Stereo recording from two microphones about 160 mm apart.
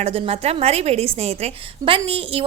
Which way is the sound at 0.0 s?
40° right (ahead or behind).